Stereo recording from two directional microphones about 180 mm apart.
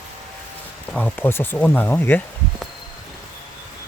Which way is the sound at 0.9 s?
10° left (ahead or behind).